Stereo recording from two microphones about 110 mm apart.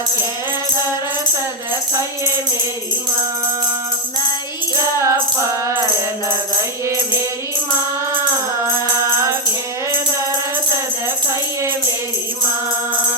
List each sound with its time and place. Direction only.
4.7 s music: 25° right (ahead or behind)
9.1 s music: 25° right (ahead or behind)